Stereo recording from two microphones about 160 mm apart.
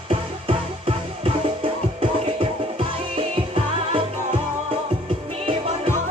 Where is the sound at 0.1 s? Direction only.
35° right (ahead or behind).